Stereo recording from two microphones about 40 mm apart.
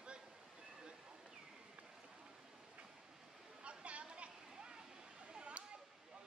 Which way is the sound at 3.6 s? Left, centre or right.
Right.